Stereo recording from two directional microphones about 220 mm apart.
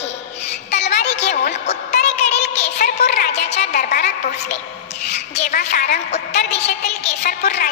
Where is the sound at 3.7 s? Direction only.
45° left (ahead or behind).